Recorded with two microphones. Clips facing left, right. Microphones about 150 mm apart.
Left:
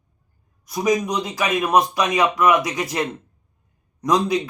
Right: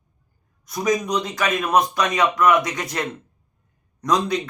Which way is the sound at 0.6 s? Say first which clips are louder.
Left 2 dB; 5° left (ahead or behind).